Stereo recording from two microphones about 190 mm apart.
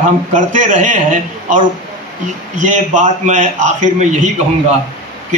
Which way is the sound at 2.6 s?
40° right (ahead or behind).